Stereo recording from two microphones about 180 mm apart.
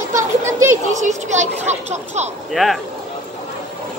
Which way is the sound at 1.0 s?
40° right (ahead or behind).